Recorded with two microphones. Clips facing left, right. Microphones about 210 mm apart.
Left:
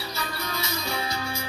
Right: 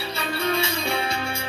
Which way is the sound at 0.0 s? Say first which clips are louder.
Right 7 dB; 30° right (ahead or behind).